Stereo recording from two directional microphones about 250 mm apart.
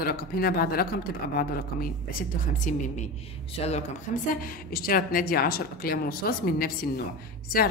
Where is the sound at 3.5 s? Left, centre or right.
Left.